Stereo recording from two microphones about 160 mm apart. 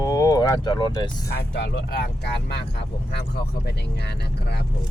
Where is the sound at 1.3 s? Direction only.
90° left.